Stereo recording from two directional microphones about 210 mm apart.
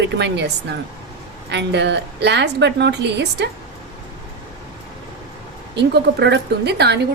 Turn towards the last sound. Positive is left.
turn(degrees=-55)  # may be behind; listen again after turning